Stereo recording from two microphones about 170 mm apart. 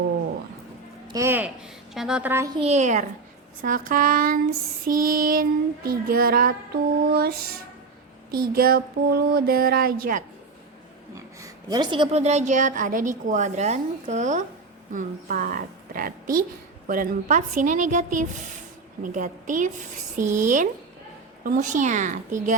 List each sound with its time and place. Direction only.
1.0 s a woman's voice: 20° right (ahead or behind)
2.6 s a woman's voice: 40° right (ahead or behind); by 10.2 s 55° right (ahead or behind)
11.1 s a woman's voice: 20° right (ahead or behind); by 22.5 s 45° right (ahead or behind)